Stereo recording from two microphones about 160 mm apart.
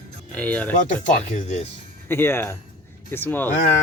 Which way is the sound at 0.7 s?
55° left (ahead or behind).